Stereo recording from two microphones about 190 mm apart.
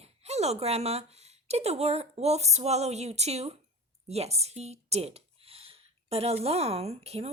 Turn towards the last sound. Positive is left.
turn(degrees=-35)  # may be behind; listen again after turning